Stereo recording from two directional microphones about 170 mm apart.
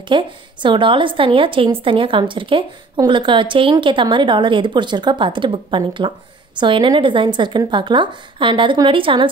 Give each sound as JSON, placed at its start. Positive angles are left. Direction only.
{"t": 0.1, "sound": "a woman's voice", "side_deg": -30}